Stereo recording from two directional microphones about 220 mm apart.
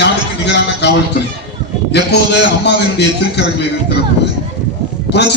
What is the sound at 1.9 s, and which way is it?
A man's voice, 50° left (ahead or behind).